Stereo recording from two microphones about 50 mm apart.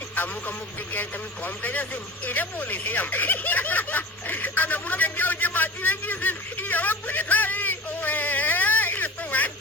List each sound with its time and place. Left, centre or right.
1.6 s speech: left